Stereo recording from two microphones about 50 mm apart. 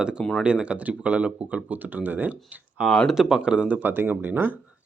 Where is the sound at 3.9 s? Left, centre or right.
Right.